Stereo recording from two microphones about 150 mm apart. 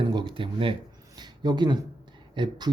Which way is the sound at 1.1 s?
30° right (ahead or behind).